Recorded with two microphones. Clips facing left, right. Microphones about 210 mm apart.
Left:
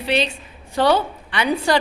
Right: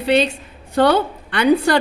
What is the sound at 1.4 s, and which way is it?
Speech, 60° right (ahead or behind).